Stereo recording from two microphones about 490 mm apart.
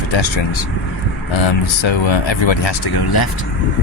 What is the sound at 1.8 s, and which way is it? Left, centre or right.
Speech, left.